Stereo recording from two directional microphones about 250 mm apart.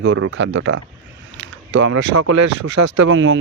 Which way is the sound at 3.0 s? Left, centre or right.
Right.